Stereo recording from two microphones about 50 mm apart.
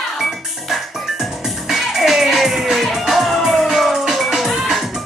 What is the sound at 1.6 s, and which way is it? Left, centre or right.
Music, centre.